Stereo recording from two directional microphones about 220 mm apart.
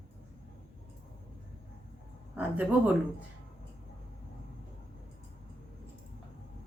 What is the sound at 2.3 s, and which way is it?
Speech, 5° right (ahead or behind).